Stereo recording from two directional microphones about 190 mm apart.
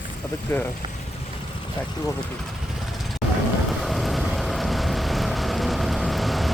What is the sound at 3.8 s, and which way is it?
Vehicle, centre (ahead or behind).